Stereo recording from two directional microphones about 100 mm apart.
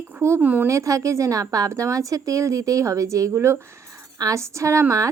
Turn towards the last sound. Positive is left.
turn(degrees=-30)  # may be behind; listen again after turning